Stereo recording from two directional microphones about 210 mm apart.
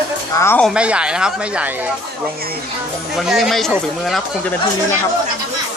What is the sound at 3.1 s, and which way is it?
Speech, centre (ahead or behind).